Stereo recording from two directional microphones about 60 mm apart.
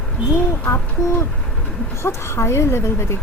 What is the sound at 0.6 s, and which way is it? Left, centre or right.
Speech, left.